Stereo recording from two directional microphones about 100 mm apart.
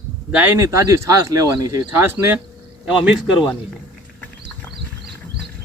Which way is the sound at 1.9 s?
20° right (ahead or behind).